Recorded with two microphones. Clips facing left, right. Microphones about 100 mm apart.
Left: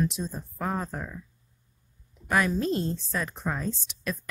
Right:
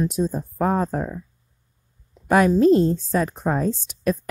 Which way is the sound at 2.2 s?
40° right (ahead or behind).